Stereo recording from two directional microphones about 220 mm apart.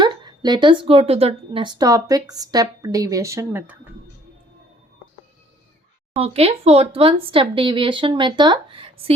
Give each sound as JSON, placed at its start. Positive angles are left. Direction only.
{"t": 0.0, "sound": "a woman's voice", "side_deg": -20}
{"t": 6.1, "sound": "speech", "side_deg": -25}